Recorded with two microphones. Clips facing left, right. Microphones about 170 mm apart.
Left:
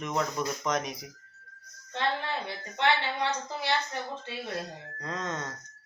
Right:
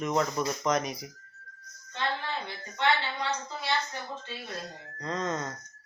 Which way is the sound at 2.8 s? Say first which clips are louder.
Left 1 dB; 65° left (ahead or behind).